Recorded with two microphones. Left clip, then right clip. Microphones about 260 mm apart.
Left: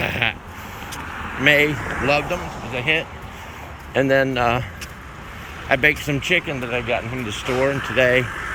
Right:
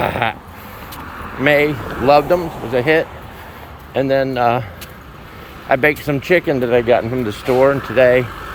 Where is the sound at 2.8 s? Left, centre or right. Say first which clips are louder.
Right 6 dB; centre.